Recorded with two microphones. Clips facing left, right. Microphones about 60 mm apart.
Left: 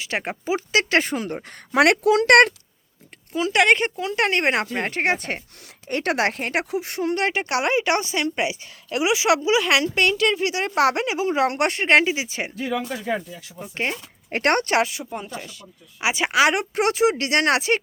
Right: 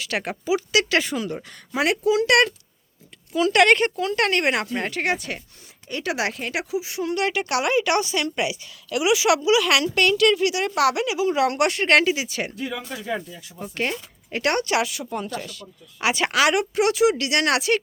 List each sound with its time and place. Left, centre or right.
0.0 s a woman's voice: left
0.4 s speech: left
1.7 s speech: left
3.3 s a woman's voice: left
5.9 s speech: left
7.0 s a woman's voice: left
14.3 s speech: left
15.1 s speech: centre
16.5 s speech: left